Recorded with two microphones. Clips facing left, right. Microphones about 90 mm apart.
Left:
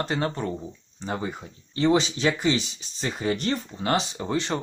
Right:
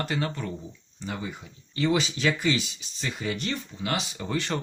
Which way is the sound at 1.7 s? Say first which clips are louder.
Left 4 dB; 30° left (ahead or behind).